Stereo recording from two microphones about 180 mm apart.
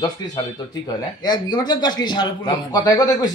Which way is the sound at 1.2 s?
25° left (ahead or behind).